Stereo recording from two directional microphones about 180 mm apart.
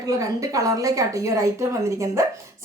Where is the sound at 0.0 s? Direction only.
20° right (ahead or behind).